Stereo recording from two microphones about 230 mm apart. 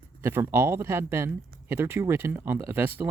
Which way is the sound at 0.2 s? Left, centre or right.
Centre.